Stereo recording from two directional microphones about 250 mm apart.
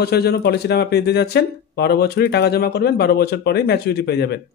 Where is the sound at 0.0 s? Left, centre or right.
Left.